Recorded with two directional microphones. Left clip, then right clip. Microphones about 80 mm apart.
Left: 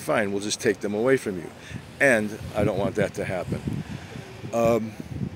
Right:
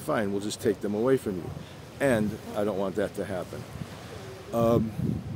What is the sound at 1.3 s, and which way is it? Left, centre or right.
Speech, left.